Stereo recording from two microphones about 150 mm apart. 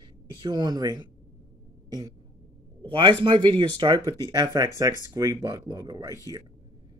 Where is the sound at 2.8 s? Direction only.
35° right (ahead or behind).